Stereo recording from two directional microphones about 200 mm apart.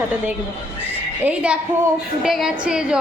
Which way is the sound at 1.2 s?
5° right (ahead or behind).